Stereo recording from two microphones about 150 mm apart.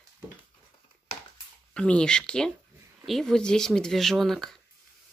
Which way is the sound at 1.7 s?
5° left (ahead or behind).